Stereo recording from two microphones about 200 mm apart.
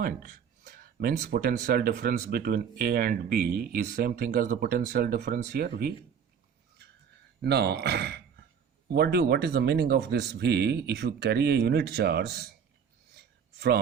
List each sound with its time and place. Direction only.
0.0 s speech: 45° right (ahead or behind)
7.4 s speech: 55° right (ahead or behind)
13.1 s a sound: 55° right (ahead or behind)